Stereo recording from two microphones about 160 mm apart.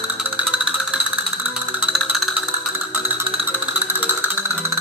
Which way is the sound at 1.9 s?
5° right (ahead or behind).